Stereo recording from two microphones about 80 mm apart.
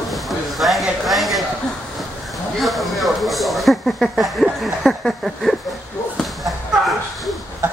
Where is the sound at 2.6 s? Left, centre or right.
Centre.